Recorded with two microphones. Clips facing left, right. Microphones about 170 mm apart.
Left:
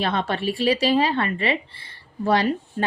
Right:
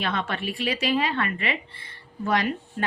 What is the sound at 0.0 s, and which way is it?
A woman's voice, 35° left (ahead or behind).